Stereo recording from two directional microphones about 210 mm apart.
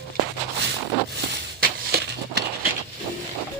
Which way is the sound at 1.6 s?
50° right (ahead or behind).